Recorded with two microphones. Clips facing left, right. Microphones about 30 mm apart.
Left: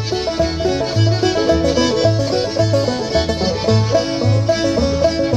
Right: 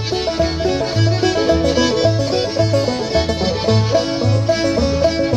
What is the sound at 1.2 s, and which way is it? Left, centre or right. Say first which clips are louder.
Music: even; centre.